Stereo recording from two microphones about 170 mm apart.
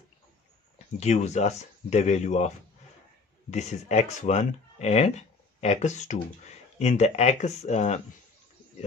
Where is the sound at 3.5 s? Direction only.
40° left (ahead or behind).